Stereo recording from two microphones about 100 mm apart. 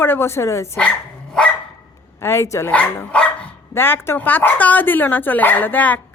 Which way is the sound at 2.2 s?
25° left (ahead or behind).